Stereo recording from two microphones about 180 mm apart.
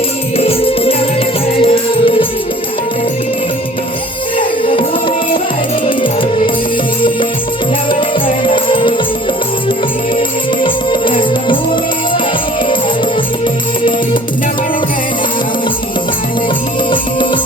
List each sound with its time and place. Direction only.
0.3 s music: 30° left (ahead or behind)
4.4 s music: 30° left (ahead or behind)
8.4 s music: 30° left (ahead or behind)
10.6 s music: 25° left (ahead or behind)